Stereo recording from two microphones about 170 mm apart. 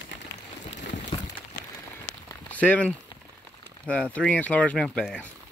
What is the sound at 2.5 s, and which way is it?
Speech, 10° left (ahead or behind).